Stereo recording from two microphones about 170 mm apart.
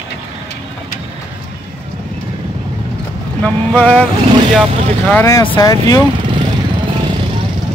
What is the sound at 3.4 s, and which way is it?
Vehicle, 5° left (ahead or behind).